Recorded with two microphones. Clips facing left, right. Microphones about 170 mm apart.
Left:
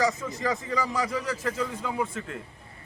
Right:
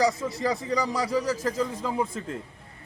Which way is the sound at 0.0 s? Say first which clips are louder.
Right 2 dB; 35° right (ahead or behind).